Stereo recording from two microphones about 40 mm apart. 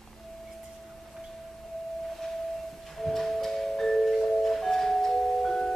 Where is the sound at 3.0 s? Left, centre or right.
Centre.